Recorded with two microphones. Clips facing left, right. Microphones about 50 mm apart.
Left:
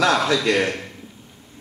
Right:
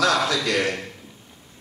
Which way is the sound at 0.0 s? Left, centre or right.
Left.